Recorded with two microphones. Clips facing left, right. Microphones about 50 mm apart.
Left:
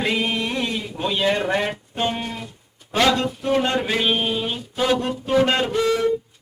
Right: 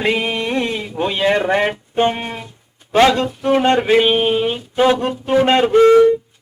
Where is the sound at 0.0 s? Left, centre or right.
Right.